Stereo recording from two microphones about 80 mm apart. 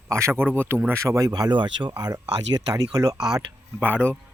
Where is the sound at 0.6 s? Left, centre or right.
Right.